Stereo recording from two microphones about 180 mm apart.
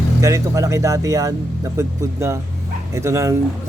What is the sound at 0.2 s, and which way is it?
A man's voice, 20° right (ahead or behind).